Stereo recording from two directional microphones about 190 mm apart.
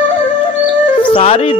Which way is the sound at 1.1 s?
30° left (ahead or behind).